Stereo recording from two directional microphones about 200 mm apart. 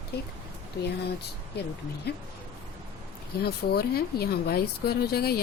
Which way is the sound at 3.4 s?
50° left (ahead or behind).